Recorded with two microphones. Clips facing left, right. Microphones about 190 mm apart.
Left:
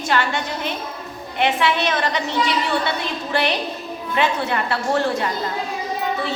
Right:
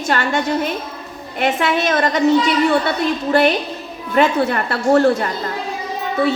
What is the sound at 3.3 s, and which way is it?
A woman's voice, 45° right (ahead or behind).